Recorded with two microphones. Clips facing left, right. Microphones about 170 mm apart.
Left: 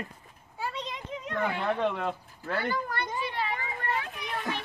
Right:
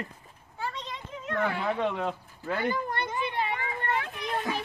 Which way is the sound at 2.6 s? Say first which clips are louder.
Right 4 dB; 20° right (ahead or behind).